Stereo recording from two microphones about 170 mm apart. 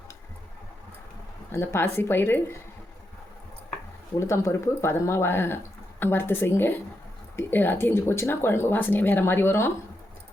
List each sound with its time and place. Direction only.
1.5 s speech: 15° left (ahead or behind)
4.2 s speech: 15° left (ahead or behind)